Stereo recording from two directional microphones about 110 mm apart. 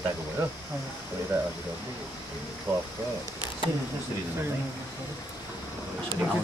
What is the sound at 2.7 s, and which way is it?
Speech, 25° right (ahead or behind).